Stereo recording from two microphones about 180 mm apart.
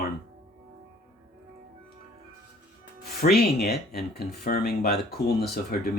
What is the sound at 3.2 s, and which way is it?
Speech, 60° left (ahead or behind).